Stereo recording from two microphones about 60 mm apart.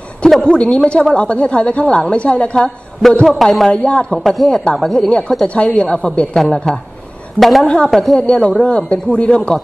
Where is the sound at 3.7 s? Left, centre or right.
Centre.